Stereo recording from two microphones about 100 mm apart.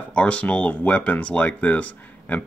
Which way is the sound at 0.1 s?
10° left (ahead or behind).